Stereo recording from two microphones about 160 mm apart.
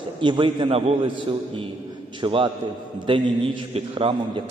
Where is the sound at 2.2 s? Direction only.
30° right (ahead or behind).